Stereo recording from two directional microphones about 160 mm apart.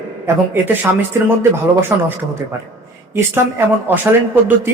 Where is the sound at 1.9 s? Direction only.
15° right (ahead or behind).